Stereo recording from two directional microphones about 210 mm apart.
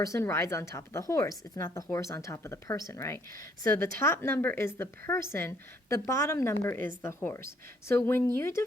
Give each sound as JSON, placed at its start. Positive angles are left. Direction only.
{"t": 0.0, "sound": "a woman's voice", "side_deg": 15}